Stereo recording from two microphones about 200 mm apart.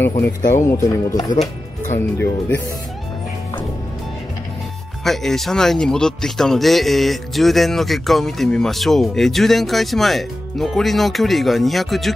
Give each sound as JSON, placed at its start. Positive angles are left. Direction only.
{"t": 0.7, "sound": "speech", "side_deg": 15}
{"t": 5.0, "sound": "speech", "side_deg": 0}